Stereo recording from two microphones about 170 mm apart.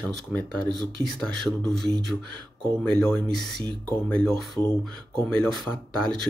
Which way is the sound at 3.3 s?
70° right (ahead or behind).